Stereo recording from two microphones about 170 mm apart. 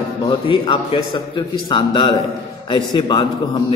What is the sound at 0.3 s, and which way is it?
A man's voice, 30° left (ahead or behind).